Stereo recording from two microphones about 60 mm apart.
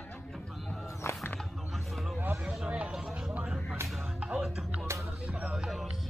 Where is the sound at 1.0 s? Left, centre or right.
Left.